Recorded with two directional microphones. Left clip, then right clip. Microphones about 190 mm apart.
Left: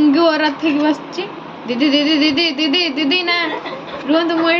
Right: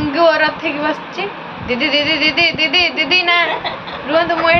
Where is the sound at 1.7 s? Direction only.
30° left (ahead or behind).